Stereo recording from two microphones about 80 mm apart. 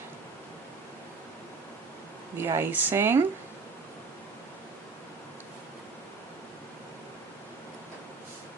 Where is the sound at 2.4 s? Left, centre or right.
Right.